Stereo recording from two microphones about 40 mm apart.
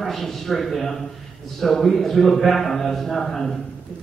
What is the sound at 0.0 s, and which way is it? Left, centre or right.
A man's voice, centre.